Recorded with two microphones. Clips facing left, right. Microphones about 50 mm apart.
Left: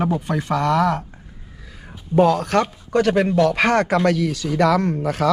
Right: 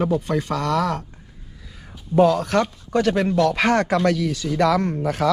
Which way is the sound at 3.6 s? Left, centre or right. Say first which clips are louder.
Left 1 dB; left.